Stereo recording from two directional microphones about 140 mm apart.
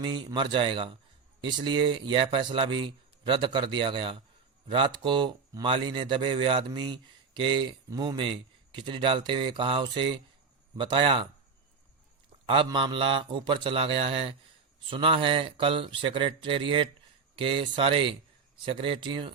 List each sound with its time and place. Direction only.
0.0 s speech: 35° right (ahead or behind)
12.5 s speech: 35° right (ahead or behind)